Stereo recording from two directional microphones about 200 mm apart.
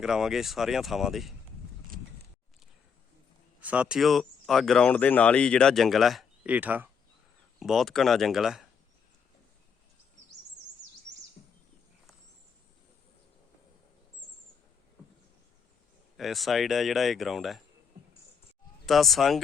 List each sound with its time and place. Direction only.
0.0 s speech: centre (ahead or behind)
3.6 s speech: 5° right (ahead or behind)
16.1 s speech: centre (ahead or behind)
18.9 s speech: centre (ahead or behind)